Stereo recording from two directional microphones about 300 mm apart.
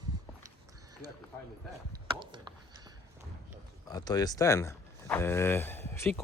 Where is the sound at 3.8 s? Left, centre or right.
Centre.